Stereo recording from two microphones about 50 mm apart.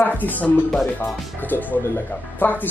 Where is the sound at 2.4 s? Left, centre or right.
Left.